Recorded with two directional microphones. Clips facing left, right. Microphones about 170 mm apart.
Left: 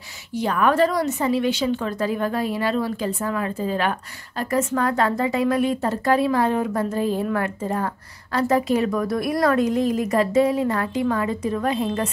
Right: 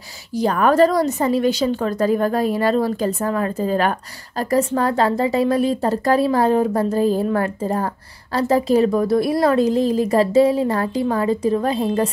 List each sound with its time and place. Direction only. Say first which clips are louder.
0.4 s a woman's voice: right 4 dB; 40° right (ahead or behind)